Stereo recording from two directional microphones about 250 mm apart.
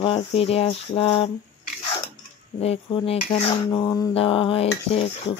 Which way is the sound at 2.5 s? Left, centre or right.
Left.